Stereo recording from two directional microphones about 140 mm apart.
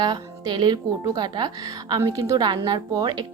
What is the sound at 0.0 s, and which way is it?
A woman's voice, 30° right (ahead or behind).